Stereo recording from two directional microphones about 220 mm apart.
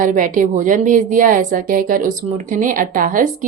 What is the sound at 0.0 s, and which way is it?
Speech, 35° right (ahead or behind).